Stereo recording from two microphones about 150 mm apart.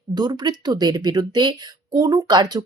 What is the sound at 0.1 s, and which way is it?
Speech, 30° right (ahead or behind).